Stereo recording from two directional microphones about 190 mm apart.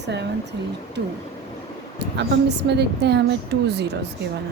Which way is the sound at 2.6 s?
60° right (ahead or behind).